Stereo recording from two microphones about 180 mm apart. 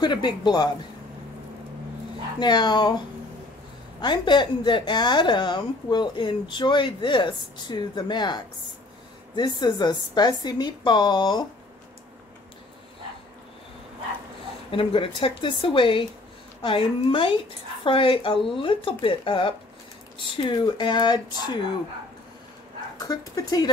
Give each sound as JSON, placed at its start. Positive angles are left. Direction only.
{"t": 0.0, "sound": "a woman's voice", "side_deg": 25}
{"t": 2.4, "sound": "a woman's voice", "side_deg": 25}
{"t": 4.0, "sound": "a woman's voice", "side_deg": 25}
{"t": 14.7, "sound": "a woman's voice", "side_deg": 30}
{"t": 22.9, "sound": "a woman's voice", "side_deg": 20}